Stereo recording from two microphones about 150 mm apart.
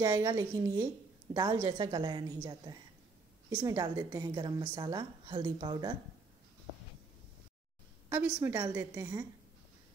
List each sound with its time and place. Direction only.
0.0 s a woman's voice: 20° right (ahead or behind)
8.1 s a woman's voice: 15° right (ahead or behind)